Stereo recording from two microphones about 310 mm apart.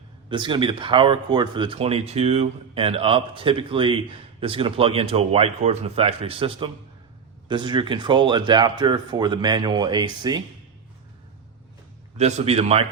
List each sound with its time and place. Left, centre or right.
0.3 s speech: centre
12.1 s a man's voice: right